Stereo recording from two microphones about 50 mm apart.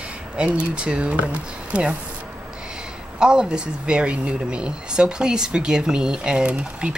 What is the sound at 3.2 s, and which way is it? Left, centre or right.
Speech, centre.